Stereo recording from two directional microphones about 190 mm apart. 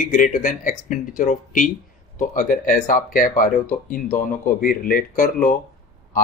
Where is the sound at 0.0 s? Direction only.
45° left (ahead or behind).